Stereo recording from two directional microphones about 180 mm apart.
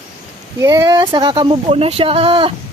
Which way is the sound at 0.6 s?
20° right (ahead or behind).